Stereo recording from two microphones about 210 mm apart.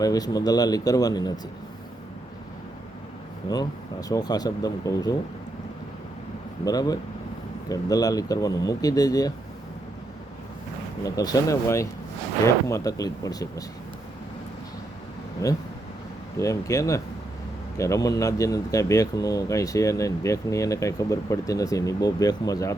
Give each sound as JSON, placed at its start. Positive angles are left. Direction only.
{"t": 0.0, "sound": "speech", "side_deg": 15}
{"t": 4.1, "sound": "speech", "side_deg": 20}
{"t": 6.7, "sound": "speech", "side_deg": 15}
{"t": 11.0, "sound": "speech", "side_deg": 15}
{"t": 15.4, "sound": "speech", "side_deg": 15}